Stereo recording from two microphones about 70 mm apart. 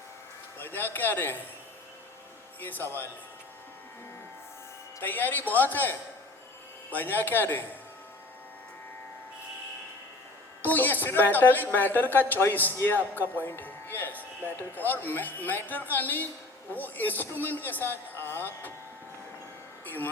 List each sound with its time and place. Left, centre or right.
0.6 s speech: left
2.6 s speech: left
5.0 s speech: left
10.6 s speech: left
19.8 s a sound: left